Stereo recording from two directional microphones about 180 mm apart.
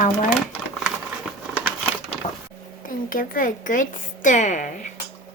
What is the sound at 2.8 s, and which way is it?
A woman's voice, 50° left (ahead or behind).